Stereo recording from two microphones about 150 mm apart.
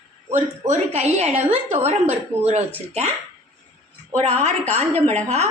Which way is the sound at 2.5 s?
50° right (ahead or behind).